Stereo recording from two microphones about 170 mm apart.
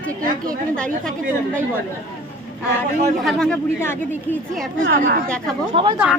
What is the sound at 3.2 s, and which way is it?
Speech, 5° left (ahead or behind).